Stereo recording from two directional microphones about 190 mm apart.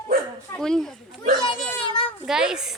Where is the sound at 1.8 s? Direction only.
25° left (ahead or behind).